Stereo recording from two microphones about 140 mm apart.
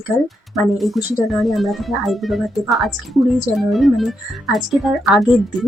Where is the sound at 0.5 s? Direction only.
Centre (ahead or behind).